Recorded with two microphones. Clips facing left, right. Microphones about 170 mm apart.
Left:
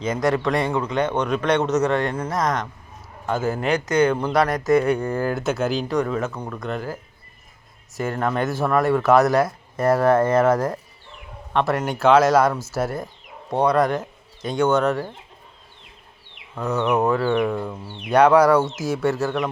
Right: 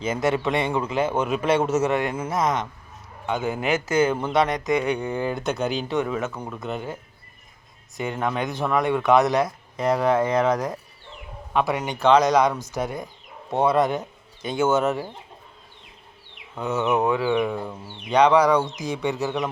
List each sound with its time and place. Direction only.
0.1 s speech: 25° right (ahead or behind)
0.3 s a man's voice: 5° right (ahead or behind)
4.4 s speech: 20° right (ahead or behind)
4.8 s speech: centre (ahead or behind)
7.9 s a man's voice: 15° right (ahead or behind)
8.4 s speech: 5° left (ahead or behind)
10.0 s a man's voice: 15° right (ahead or behind)
11.5 s speech: centre (ahead or behind)
16.6 s a man's voice: centre (ahead or behind)
18.1 s speech: 10° left (ahead or behind)